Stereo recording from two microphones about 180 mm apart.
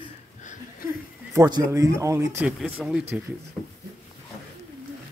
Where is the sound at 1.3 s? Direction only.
20° right (ahead or behind).